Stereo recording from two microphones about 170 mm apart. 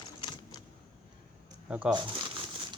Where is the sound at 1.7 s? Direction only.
5° right (ahead or behind).